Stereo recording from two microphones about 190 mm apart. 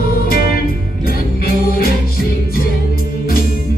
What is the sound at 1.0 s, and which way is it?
Music, 50° left (ahead or behind).